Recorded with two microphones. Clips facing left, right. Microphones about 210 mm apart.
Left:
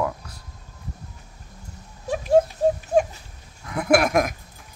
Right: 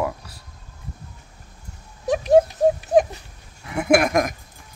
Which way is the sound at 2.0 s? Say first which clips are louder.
Right 5 dB; 80° right.